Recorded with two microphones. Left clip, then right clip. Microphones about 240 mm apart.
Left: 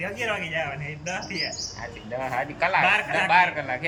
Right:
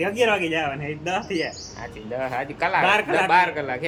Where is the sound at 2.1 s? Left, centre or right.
Centre.